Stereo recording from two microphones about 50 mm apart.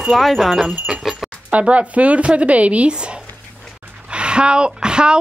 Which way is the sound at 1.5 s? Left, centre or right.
Right.